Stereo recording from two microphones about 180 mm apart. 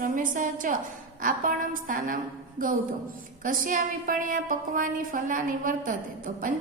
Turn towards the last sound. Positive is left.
turn(degrees=-50)  # may be behind; listen again after turning